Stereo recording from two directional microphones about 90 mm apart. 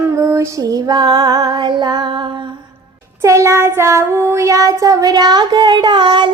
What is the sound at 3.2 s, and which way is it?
Child singing, 35° right (ahead or behind).